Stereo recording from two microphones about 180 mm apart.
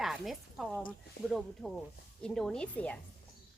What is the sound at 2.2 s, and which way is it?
Speech, 5° left (ahead or behind).